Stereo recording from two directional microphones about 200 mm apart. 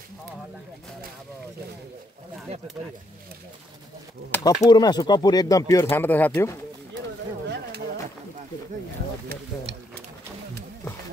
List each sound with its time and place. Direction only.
4.3 s speech: 15° left (ahead or behind)
7.4 s a sound: 55° right (ahead or behind)
9.3 s stir: 50° right (ahead or behind)